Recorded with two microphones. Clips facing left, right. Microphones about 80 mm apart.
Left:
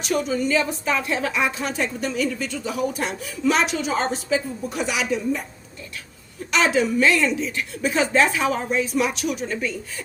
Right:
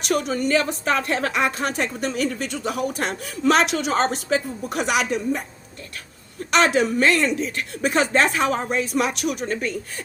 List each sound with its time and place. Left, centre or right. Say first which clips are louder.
0.1 s a woman's voice: right 1 dB; right
6.5 s a woman's voice: right 1 dB; right